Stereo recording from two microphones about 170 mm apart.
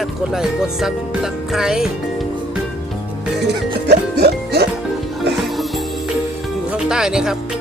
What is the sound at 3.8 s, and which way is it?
Music, 70° right (ahead or behind).